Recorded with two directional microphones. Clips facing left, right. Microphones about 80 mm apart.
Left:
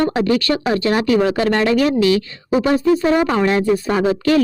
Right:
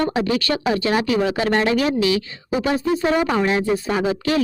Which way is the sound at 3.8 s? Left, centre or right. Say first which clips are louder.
Left 4 dB; left.